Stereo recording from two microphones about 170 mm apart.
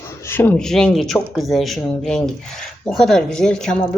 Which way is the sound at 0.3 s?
10° left (ahead or behind).